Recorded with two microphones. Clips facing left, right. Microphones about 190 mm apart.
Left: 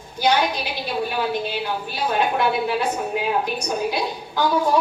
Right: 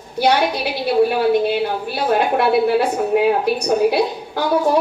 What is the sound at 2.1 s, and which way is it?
A woman's voice, 55° right (ahead or behind).